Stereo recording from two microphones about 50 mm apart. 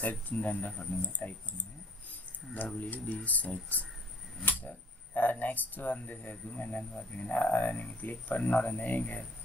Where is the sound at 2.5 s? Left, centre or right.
Left.